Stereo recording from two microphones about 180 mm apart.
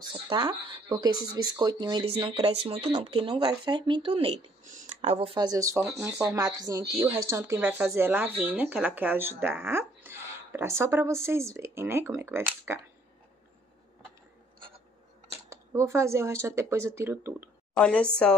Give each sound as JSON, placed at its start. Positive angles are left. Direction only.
{"t": 0.0, "sound": "speech", "side_deg": -25}
{"t": 4.6, "sound": "speech", "side_deg": -45}
{"t": 15.5, "sound": "speech", "side_deg": -15}
{"t": 17.7, "sound": "speech", "side_deg": 5}